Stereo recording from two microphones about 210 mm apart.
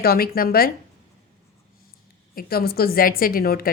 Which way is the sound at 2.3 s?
45° left (ahead or behind).